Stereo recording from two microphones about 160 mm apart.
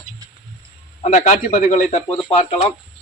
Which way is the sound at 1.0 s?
50° left (ahead or behind).